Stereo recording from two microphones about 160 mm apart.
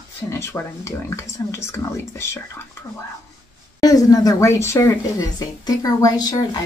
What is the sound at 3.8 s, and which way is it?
Speech, 25° left (ahead or behind).